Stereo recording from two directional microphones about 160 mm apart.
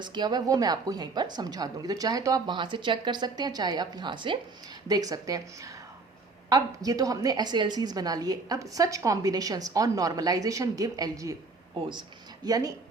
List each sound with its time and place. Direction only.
0.0 s a woman's voice: 25° right (ahead or behind)